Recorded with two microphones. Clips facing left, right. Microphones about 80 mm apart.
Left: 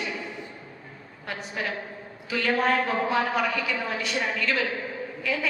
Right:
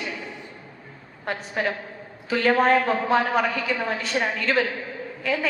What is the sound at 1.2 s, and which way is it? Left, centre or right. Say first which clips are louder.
A woman's voice: right 5 dB; right.